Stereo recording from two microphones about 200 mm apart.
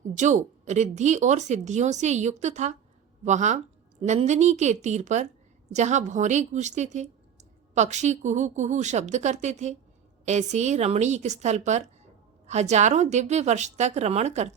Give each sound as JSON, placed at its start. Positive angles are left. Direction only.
{"t": 0.2, "sound": "speech", "side_deg": -35}